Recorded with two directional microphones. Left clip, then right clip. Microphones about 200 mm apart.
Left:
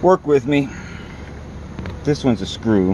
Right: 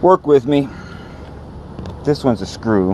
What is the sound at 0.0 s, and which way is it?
Speech, 20° right (ahead or behind).